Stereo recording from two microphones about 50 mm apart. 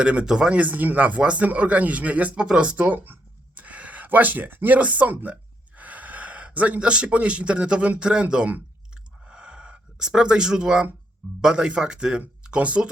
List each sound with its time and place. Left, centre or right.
0.0 s speech: right
0.5 s speech: right; by 8.4 s centre
9.2 s a sound: right
11.3 s speech: centre